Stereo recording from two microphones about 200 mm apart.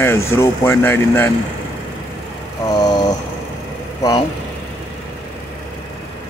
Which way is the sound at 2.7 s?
20° left (ahead or behind).